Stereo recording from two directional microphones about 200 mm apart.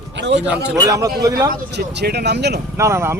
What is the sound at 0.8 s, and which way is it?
Speech, 15° right (ahead or behind).